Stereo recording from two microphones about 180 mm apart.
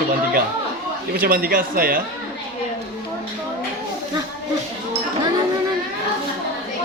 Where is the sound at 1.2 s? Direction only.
55° right (ahead or behind).